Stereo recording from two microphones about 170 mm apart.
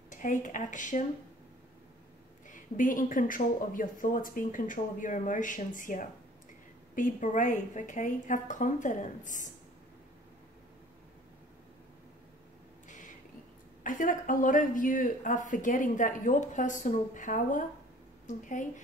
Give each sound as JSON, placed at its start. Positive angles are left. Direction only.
{"t": 0.1, "sound": "speech", "side_deg": 50}
{"t": 2.5, "sound": "speech", "side_deg": 50}
{"t": 12.8, "sound": "a sound", "side_deg": 45}
{"t": 13.8, "sound": "a woman's voice", "side_deg": 50}